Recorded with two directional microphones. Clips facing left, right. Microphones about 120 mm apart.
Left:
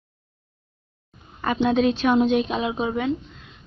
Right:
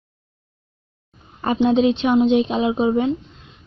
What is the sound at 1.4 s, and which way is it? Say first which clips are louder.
Speech: right 4 dB; 25° right (ahead or behind).